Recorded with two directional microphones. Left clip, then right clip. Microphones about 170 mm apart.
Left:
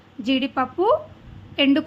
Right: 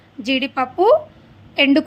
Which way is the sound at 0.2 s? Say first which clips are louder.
Right 3 dB; 30° right (ahead or behind).